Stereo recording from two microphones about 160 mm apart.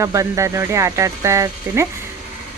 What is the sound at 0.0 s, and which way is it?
Speech, 20° right (ahead or behind).